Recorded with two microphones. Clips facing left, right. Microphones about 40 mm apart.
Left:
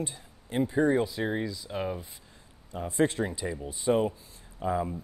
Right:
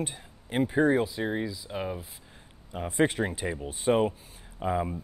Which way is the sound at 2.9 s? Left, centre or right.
Right.